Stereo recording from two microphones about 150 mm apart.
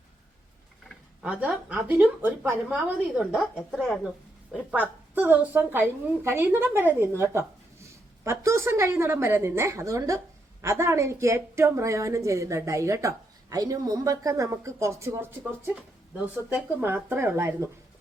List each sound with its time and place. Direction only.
1.2 s a woman's voice: 5° right (ahead or behind)